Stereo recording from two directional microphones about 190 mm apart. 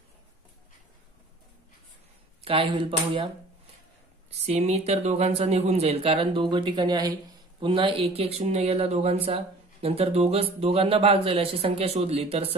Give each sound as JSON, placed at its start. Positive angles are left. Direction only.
{"t": 2.4, "sound": "speech", "side_deg": -30}
{"t": 4.5, "sound": "speech", "side_deg": -35}